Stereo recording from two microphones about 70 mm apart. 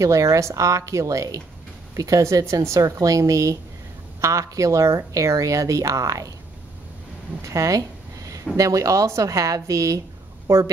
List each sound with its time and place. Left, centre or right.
0.0 s speech: right
7.4 s speech: right